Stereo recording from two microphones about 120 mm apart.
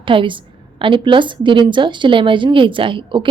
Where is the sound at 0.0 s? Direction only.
45° right (ahead or behind).